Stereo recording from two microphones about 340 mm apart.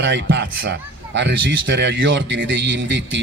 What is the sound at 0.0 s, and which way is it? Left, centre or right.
Speech, right.